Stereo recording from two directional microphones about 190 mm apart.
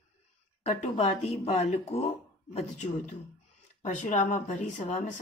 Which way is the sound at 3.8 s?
40° left (ahead or behind).